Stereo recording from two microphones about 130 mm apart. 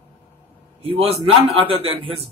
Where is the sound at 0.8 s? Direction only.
45° right (ahead or behind).